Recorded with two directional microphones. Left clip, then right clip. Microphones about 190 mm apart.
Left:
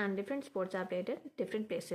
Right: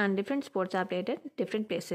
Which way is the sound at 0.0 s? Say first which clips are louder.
Right 7 dB; 40° right (ahead or behind).